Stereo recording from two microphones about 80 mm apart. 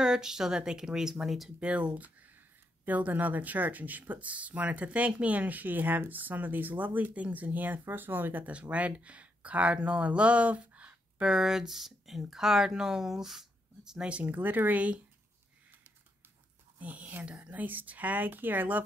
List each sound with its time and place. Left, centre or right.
0.0 s speech: centre
1.7 s speech: centre
14.2 s speech: right
16.7 s speech: centre